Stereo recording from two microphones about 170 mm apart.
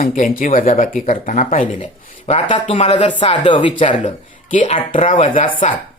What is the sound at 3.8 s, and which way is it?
Speech, 45° left (ahead or behind).